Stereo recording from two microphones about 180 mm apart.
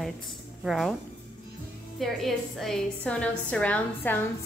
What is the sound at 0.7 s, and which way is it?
Speech, centre (ahead or behind).